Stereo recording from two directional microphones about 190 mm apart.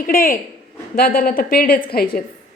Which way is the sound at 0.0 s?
50° left (ahead or behind).